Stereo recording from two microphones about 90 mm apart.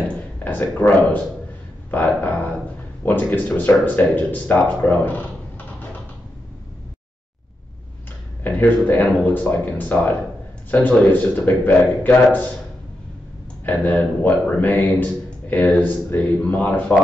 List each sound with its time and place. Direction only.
0.4 s speech: 20° left (ahead or behind)
8.5 s speech: 20° left (ahead or behind)
13.7 s speech: 20° left (ahead or behind)